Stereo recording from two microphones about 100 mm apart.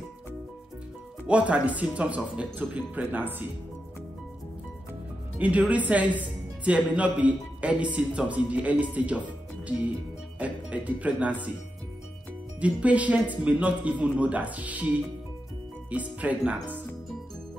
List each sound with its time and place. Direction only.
1.2 s a woman's voice: 15° right (ahead or behind)
5.4 s a woman's voice: 15° right (ahead or behind)
12.5 s a woman's voice: 15° right (ahead or behind)
15.9 s a woman's voice: 15° right (ahead or behind)